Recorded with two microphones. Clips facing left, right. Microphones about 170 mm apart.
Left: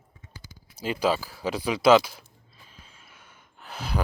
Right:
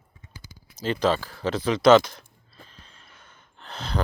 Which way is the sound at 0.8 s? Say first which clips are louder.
Right 2 dB; 10° left (ahead or behind).